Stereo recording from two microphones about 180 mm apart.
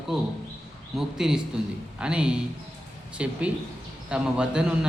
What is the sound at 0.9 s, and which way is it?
A man's voice, 5° right (ahead or behind).